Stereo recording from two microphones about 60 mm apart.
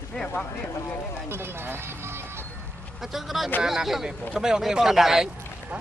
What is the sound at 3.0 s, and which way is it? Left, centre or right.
Speech, centre.